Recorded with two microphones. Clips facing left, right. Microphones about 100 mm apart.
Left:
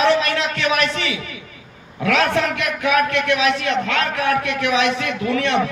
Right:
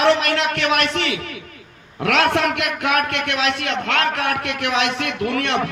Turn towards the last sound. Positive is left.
turn(degrees=-60)  # may be behind; listen again after turning